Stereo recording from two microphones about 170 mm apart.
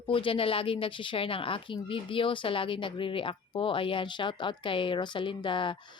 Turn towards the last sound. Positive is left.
turn(degrees=30)  # may be behind; listen again after turning